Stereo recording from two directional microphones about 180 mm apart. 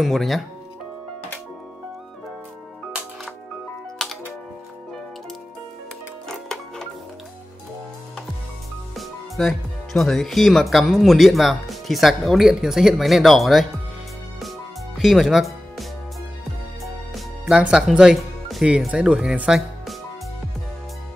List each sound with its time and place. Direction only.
0.0 s speech: centre (ahead or behind)
4.0 s music: centre (ahead or behind)
6.2 s music: 5° left (ahead or behind)
8.9 s speech: centre (ahead or behind)
15.0 s music: centre (ahead or behind)
16.8 s speech: centre (ahead or behind)